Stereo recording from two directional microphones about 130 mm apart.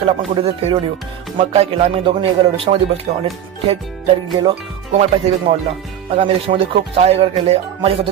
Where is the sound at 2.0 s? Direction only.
40° right (ahead or behind).